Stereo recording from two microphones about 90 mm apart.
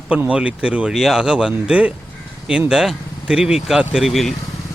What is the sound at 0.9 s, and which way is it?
Speech, 5° right (ahead or behind).